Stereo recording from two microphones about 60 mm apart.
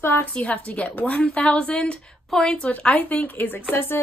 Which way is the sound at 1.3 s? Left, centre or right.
Centre.